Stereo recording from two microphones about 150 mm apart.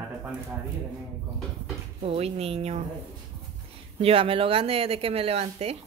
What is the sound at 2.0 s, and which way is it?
Speech, 40° right (ahead or behind).